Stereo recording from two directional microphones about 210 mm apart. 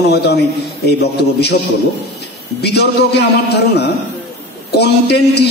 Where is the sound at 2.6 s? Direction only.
50° left (ahead or behind).